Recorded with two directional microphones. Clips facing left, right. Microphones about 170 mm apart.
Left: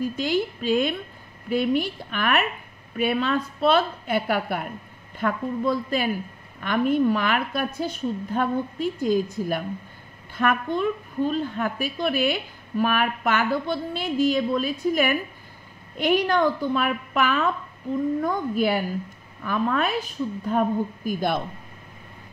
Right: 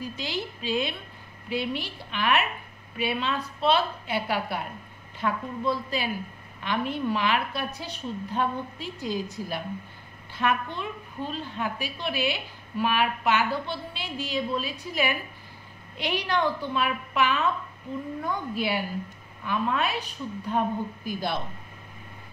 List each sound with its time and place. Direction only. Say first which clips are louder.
0.0 s a woman's voice: left 9 dB; 50° left (ahead or behind)